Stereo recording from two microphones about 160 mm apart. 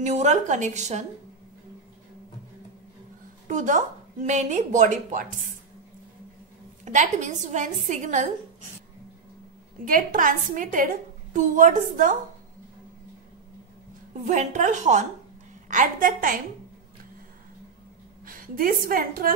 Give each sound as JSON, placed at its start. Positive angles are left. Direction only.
{"t": 0.0, "sound": "a woman's voice", "side_deg": -45}
{"t": 3.4, "sound": "a woman's voice", "side_deg": -50}
{"t": 6.8, "sound": "a woman's voice", "side_deg": -50}
{"t": 9.8, "sound": "a woman's voice", "side_deg": -60}
{"t": 14.2, "sound": "a woman's voice", "side_deg": -50}
{"t": 18.2, "sound": "a woman's voice", "side_deg": -60}